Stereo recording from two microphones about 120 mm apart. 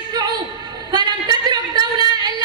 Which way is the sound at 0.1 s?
35° right (ahead or behind).